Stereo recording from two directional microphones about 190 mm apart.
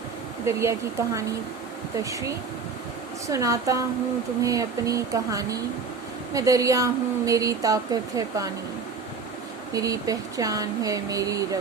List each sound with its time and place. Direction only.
0.4 s speech: 15° right (ahead or behind)
3.2 s speech: 15° right (ahead or behind)
9.7 s speech: 20° right (ahead or behind)